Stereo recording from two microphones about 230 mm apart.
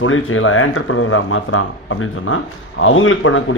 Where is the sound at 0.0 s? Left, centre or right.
Left.